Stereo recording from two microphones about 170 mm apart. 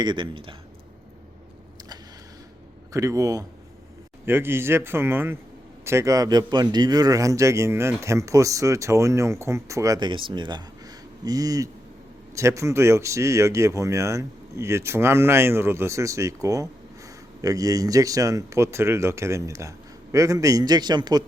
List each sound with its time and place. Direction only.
0.0 s a man's voice: 30° right (ahead or behind)
2.9 s a man's voice: 20° right (ahead or behind)